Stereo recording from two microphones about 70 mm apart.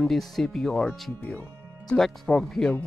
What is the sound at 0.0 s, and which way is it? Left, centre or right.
Speech, centre.